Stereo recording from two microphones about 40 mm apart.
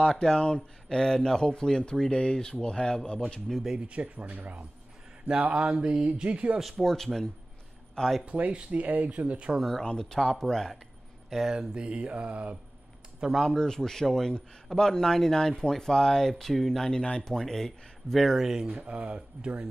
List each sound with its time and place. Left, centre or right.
0.2 s speech: centre
3.7 s speech: right
5.5 s mantra: right
6.0 s speech: right
6.8 s speech: centre
8.3 s speech: right
9.6 s speech: centre
11.5 s mantra: right
13.4 s speech: centre
16.9 s speech: left; by 18.4 s centre
18.4 s speech: centre
18.8 s speech: right